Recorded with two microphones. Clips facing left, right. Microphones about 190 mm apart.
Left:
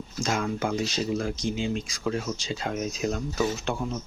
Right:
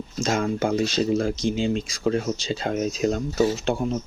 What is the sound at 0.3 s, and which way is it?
Speech, 40° right (ahead or behind).